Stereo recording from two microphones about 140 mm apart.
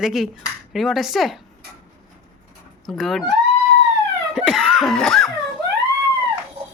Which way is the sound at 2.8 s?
Centre (ahead or behind).